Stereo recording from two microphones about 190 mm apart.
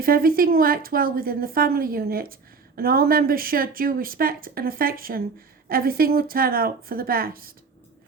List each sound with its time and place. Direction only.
0.0 s a woman's voice: 50° right (ahead or behind)